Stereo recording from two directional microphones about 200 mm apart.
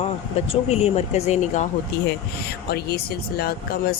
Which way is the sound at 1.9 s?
50° left (ahead or behind).